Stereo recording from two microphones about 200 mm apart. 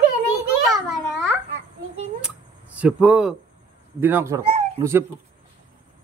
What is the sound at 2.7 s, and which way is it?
Speech, 5° right (ahead or behind).